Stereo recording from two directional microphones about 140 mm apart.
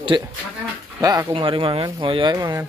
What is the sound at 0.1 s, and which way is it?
Speech, 30° right (ahead or behind).